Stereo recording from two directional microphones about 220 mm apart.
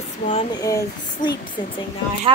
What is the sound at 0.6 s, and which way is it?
Speech, 15° left (ahead or behind).